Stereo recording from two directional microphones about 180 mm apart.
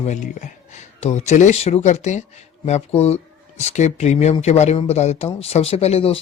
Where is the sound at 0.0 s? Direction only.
40° left (ahead or behind).